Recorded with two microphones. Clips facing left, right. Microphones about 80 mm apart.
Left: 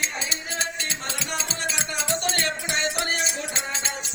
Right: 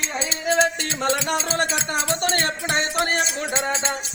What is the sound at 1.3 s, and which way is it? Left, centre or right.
Music, right.